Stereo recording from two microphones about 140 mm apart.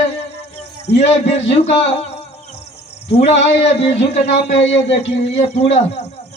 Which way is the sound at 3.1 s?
50° left (ahead or behind).